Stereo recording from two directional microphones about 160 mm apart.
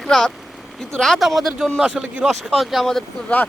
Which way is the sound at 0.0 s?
5° left (ahead or behind).